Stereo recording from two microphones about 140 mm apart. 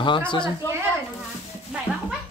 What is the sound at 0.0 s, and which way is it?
Speech, 35° left (ahead or behind).